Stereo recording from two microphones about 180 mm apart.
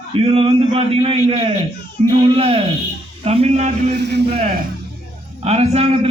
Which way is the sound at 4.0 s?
70° right (ahead or behind).